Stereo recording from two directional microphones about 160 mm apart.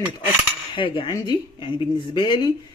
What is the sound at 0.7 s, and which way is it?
Speech, 30° left (ahead or behind).